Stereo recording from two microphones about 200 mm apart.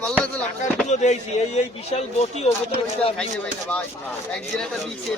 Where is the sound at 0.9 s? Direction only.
35° left (ahead or behind).